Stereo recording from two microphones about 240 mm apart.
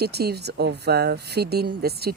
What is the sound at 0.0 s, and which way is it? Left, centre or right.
Speech, right.